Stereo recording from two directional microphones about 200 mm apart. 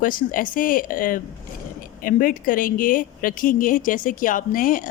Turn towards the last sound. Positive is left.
turn(degrees=40)  # may be behind; listen again after turning